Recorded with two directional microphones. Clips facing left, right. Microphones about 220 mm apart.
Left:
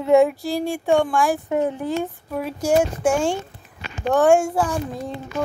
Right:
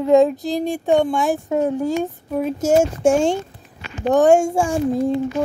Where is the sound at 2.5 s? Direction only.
25° right (ahead or behind).